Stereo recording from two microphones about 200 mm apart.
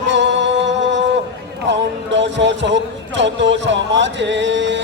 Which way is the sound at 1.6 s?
60° right (ahead or behind).